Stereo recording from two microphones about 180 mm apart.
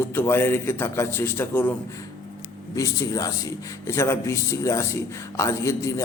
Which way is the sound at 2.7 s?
20° left (ahead or behind).